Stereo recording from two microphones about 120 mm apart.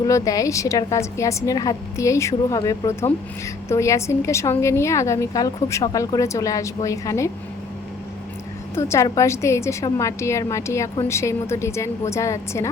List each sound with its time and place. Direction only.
0.0 s a woman's voice: 30° left (ahead or behind)
8.7 s a woman's voice: 25° left (ahead or behind)